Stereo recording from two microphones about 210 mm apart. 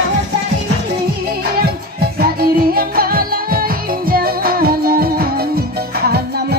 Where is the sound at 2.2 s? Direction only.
45° right (ahead or behind).